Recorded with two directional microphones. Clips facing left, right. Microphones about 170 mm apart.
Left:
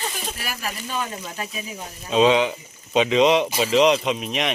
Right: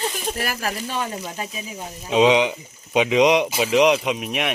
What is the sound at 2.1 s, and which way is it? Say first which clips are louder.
Speech: right 1 dB; 15° right (ahead or behind).